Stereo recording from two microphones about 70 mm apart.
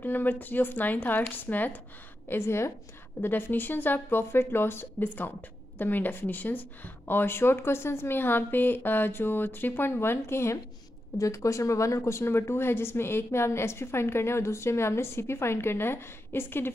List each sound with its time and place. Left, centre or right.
0.0 s speech: left
2.2 s speech: left